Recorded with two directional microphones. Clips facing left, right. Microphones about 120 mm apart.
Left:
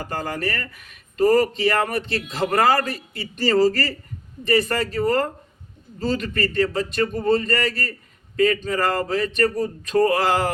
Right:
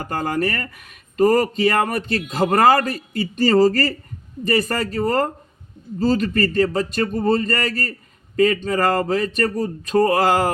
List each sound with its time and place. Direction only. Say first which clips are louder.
0.0 s speech: right 4 dB; 45° right (ahead or behind)